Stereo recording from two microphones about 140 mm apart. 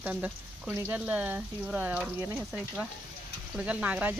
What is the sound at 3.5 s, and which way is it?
Speech, 10° right (ahead or behind).